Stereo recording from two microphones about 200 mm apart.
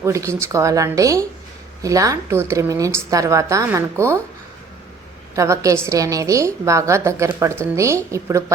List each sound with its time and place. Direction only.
0.0 s a woman's voice: 15° right (ahead or behind)
5.3 s a woman's voice: 15° right (ahead or behind)